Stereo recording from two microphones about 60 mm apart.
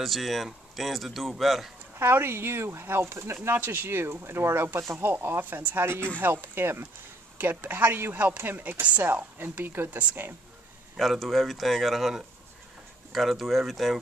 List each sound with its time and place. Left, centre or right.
0.0 s speech: centre
2.0 s speech: right
3.4 s a woman's voice: right
11.0 s speech: centre